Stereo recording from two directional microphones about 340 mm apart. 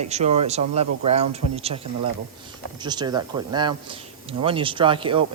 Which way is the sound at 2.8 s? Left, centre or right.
Centre.